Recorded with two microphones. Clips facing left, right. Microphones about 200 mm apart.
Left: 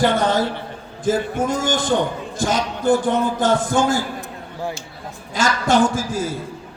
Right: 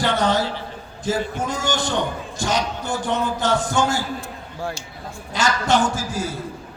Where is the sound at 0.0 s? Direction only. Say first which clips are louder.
Left 3 dB; 50° left (ahead or behind).